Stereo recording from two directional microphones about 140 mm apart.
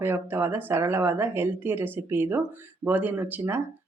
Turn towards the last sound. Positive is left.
turn(degrees=-15)  # may be behind; listen again after turning